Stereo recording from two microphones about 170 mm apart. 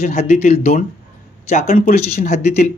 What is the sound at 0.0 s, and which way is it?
Speech, 40° left (ahead or behind).